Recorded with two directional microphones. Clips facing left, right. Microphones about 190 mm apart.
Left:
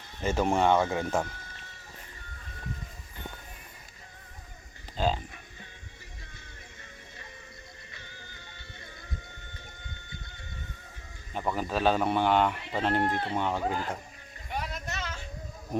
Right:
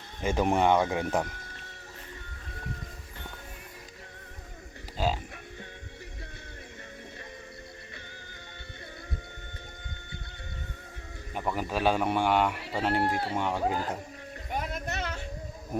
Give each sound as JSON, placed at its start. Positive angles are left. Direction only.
{"t": 0.2, "sound": "a man's voice", "side_deg": -15}
{"t": 4.9, "sound": "speech", "side_deg": -5}
{"t": 11.3, "sound": "a man's voice", "side_deg": -10}
{"t": 14.5, "sound": "child singing", "side_deg": -50}